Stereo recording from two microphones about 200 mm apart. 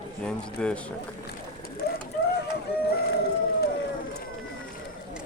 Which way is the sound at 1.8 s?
50° left (ahead or behind).